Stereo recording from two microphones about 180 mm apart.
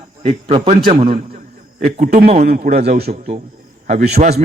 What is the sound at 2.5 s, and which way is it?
Speech, 55° right (ahead or behind).